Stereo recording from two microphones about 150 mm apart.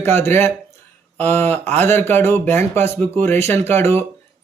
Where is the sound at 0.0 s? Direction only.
15° left (ahead or behind).